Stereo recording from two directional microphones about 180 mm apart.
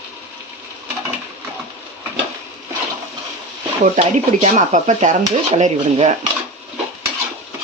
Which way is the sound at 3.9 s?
40° right (ahead or behind).